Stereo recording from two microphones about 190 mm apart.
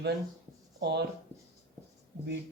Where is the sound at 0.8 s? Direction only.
60° right (ahead or behind).